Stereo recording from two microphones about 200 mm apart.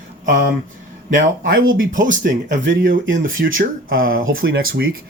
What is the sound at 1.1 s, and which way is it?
Speech, 45° right (ahead or behind).